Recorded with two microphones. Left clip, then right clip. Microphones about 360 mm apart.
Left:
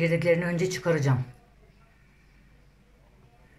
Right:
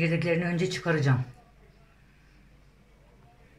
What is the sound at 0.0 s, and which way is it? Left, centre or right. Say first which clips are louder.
Speech: left 4 dB; centre.